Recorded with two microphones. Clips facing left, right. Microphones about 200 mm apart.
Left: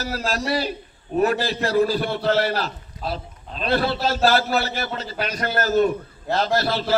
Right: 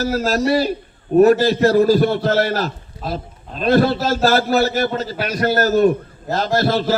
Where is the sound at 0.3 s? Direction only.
40° right (ahead or behind).